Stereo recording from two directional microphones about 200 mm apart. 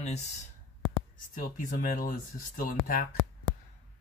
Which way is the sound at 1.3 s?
45° left (ahead or behind).